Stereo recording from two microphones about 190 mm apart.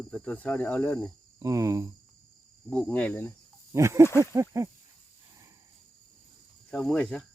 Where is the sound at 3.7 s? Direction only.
15° right (ahead or behind).